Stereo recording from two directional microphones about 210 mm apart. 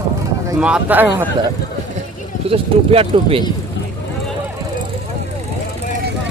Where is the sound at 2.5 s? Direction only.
25° right (ahead or behind).